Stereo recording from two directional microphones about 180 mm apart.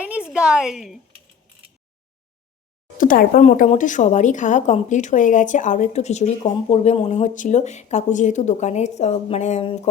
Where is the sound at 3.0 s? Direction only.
50° left (ahead or behind).